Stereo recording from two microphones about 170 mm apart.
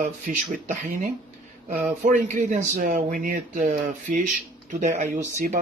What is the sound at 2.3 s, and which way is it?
Speech, 45° right (ahead or behind).